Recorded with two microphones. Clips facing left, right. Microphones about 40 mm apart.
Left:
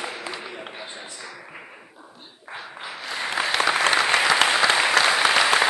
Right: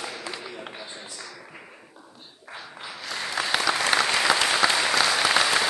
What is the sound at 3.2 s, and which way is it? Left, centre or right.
Applause, left.